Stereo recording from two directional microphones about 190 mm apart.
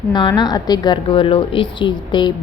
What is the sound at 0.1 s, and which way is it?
A woman's voice, 20° left (ahead or behind).